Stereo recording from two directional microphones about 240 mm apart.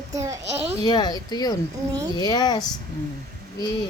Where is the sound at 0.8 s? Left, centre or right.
Centre.